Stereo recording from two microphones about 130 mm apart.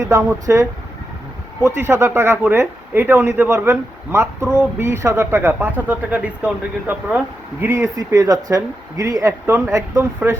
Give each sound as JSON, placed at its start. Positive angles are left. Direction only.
{"t": 0.0, "sound": "speech", "side_deg": -25}